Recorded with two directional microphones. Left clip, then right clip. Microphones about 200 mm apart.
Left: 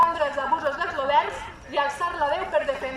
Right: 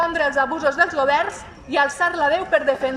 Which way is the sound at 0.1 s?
50° right (ahead or behind).